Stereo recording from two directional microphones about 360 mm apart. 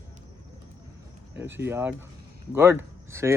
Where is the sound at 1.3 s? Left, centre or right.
Centre.